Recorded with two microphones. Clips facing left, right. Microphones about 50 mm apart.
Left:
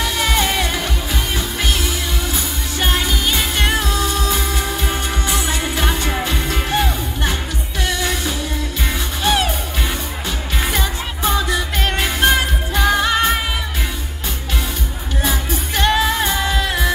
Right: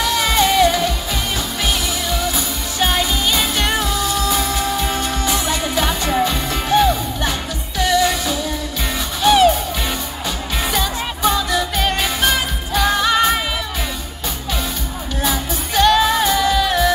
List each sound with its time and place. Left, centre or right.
0.0 s music: left
2.8 s music: left
10.6 s music: left
15.2 s music: left